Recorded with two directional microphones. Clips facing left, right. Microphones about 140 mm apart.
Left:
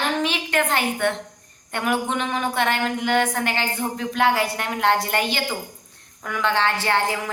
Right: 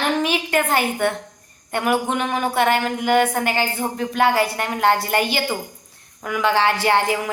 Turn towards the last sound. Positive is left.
turn(degrees=-15)  # may be behind; listen again after turning